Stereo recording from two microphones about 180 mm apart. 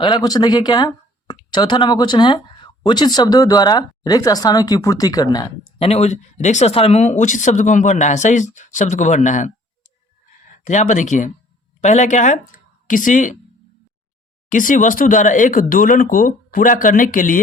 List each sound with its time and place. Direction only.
0.0 s speech: 25° left (ahead or behind)
5.8 s speech: 35° left (ahead or behind)
10.6 s speech: 40° left (ahead or behind)
14.5 s speech: 45° left (ahead or behind)